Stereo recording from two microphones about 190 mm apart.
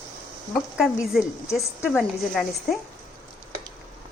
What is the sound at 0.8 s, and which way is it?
A woman's voice, centre (ahead or behind).